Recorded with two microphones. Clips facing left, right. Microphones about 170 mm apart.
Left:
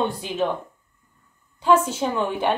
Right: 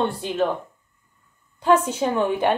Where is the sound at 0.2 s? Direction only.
Centre (ahead or behind).